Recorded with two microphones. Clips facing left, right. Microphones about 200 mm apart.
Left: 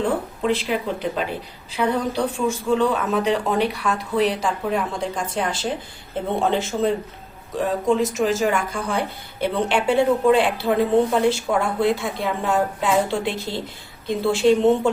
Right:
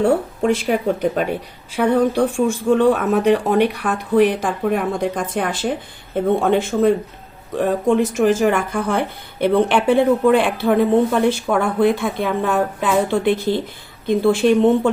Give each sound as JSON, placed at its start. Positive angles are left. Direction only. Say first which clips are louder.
{"t": 0.4, "sound": "speech", "louder": "right 5 dB", "side_deg": -50}